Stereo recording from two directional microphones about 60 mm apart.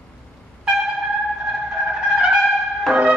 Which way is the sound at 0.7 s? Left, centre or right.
Centre.